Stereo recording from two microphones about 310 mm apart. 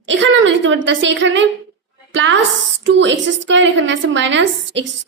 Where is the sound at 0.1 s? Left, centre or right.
Right.